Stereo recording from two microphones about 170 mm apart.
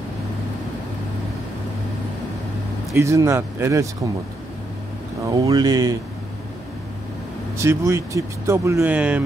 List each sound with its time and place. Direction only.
2.9 s speech: 15° right (ahead or behind)
5.2 s speech: 20° right (ahead or behind)
7.5 s speech: 15° right (ahead or behind)